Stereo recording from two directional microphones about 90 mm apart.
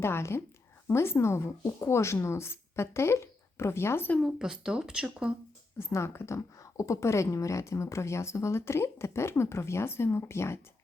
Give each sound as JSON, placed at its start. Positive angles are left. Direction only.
{"t": 0.0, "sound": "a woman's voice", "side_deg": 30}
{"t": 4.2, "sound": "speech", "side_deg": -5}
{"t": 5.8, "sound": "speech", "side_deg": 30}